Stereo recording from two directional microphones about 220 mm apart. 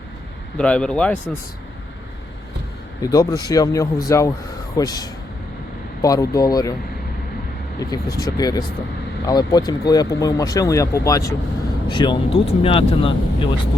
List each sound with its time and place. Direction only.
0.5 s speech: 5° left (ahead or behind)
3.0 s speech: 15° left (ahead or behind)
8.1 s speech: 15° left (ahead or behind)